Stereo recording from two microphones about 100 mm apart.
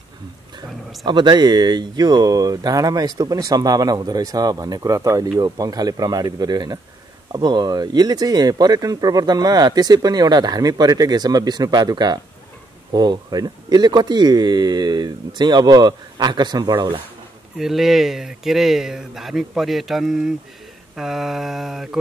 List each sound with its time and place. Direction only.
1.0 s speech: 50° right (ahead or behind)
17.6 s speech: 5° right (ahead or behind)